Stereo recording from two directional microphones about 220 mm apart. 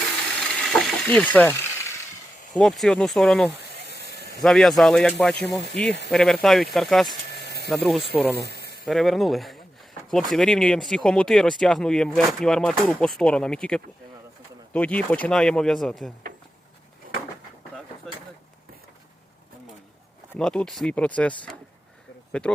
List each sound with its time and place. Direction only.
0.6 s a sound: centre (ahead or behind)
2.6 s speech: centre (ahead or behind)
3.9 s a sound: 50° left (ahead or behind)
4.4 s speech: centre (ahead or behind)
8.4 s snake: 45° right (ahead or behind)
8.9 s speech: centre (ahead or behind)
20.3 s speech: 5° left (ahead or behind)